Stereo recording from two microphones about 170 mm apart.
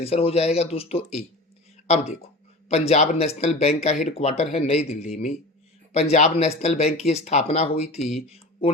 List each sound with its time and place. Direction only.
0.0 s speech: 35° left (ahead or behind)
2.6 s speech: 40° left (ahead or behind)